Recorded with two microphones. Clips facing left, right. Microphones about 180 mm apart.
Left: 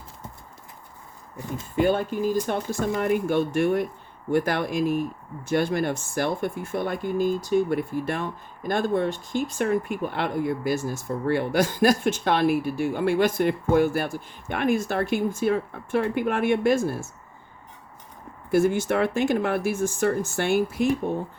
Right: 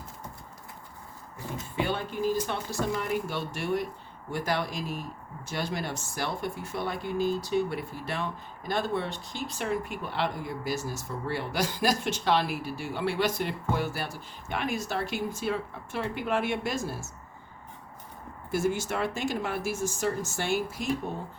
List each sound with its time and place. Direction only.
1.7 s speech: 45° left (ahead or behind)
18.5 s speech: 60° left (ahead or behind)